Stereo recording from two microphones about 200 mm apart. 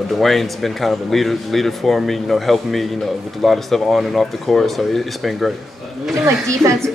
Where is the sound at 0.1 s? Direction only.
Centre (ahead or behind).